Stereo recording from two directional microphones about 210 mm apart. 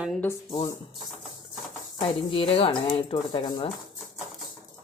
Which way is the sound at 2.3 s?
25° left (ahead or behind).